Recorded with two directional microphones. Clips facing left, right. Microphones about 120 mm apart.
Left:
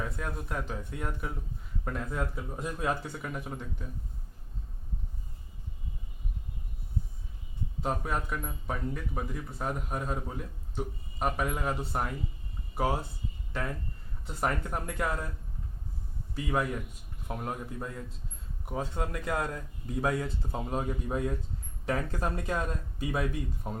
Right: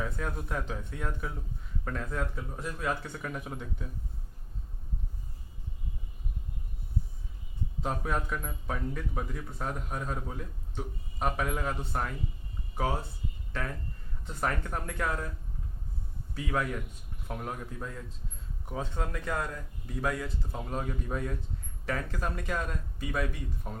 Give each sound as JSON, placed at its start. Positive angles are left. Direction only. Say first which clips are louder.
{"t": 0.0, "sound": "a man's voice", "louder": "right 1 dB", "side_deg": 0}
{"t": 2.6, "sound": "speech", "louder": "left 2 dB", "side_deg": 20}
{"t": 3.1, "sound": "a man's voice", "louder": "even", "side_deg": 5}
{"t": 7.8, "sound": "a man's voice", "louder": "even", "side_deg": 0}
{"t": 14.3, "sound": "speech", "louder": "left 1 dB", "side_deg": 10}
{"t": 16.3, "sound": "speech", "louder": "left 1 dB", "side_deg": 10}
{"t": 20.0, "sound": "speech", "louder": "left 2 dB", "side_deg": 25}